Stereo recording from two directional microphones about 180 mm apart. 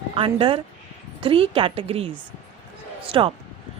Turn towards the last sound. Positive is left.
turn(degrees=-30)  # may be behind; listen again after turning